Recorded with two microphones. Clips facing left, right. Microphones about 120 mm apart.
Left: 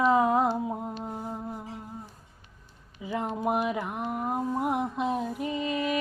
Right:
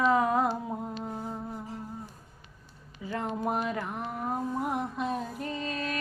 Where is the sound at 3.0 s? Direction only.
15° left (ahead or behind).